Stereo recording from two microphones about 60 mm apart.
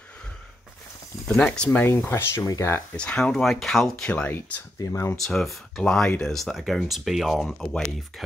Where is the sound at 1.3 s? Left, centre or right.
Centre.